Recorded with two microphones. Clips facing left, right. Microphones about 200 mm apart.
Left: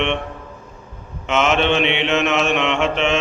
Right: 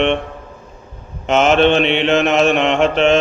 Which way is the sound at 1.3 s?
35° right (ahead or behind).